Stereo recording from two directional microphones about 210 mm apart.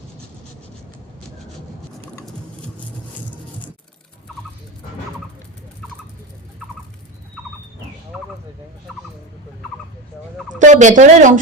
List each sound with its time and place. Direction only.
10.6 s speech: 35° right (ahead or behind)